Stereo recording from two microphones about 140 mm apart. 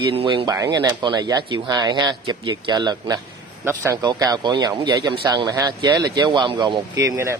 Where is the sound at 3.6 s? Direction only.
20° right (ahead or behind).